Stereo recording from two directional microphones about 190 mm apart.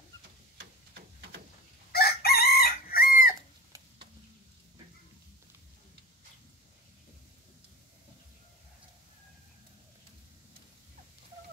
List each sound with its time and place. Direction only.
1.9 s chicken: 55° left (ahead or behind)